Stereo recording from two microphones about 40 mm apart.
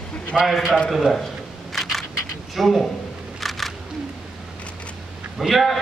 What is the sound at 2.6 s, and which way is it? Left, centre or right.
Speech, centre.